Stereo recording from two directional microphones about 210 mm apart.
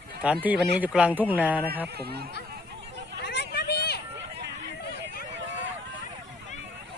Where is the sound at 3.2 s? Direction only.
50° left (ahead or behind).